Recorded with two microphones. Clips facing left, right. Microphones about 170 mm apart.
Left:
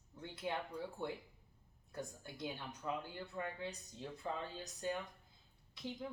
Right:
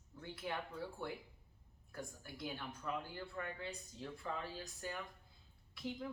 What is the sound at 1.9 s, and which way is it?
Speech, 20° left (ahead or behind).